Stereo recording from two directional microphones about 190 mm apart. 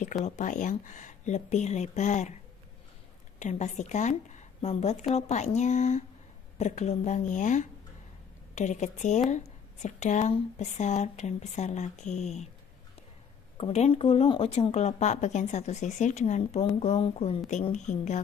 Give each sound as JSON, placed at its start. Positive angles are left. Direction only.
{"t": 0.2, "sound": "speech", "side_deg": 40}
{"t": 3.3, "sound": "speech", "side_deg": 40}
{"t": 13.6, "sound": "speech", "side_deg": 35}